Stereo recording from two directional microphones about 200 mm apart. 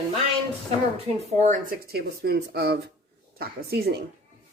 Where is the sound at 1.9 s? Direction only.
50° right (ahead or behind).